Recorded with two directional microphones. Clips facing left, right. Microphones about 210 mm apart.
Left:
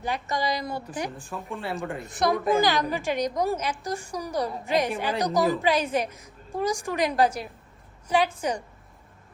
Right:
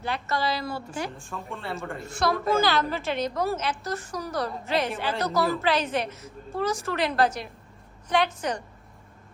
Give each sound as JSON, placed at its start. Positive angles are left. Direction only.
{"t": 0.0, "sound": "a woman's voice", "side_deg": 15}
{"t": 1.2, "sound": "a woman's voice", "side_deg": 0}
{"t": 2.0, "sound": "a woman's voice", "side_deg": 20}